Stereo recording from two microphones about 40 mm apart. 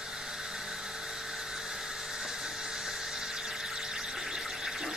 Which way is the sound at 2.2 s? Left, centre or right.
Centre.